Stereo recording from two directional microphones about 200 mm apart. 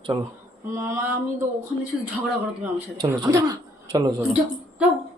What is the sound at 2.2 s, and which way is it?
Speech, 10° right (ahead or behind).